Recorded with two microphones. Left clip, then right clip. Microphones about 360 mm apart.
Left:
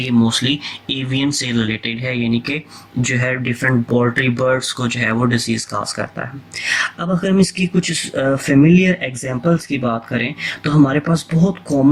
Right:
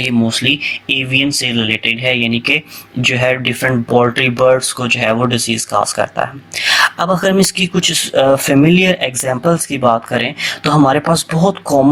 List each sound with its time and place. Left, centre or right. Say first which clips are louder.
0.3 s speech: right 5 dB; centre
9.4 s speech: right 4 dB; right
10.1 s speech: right 5 dB; centre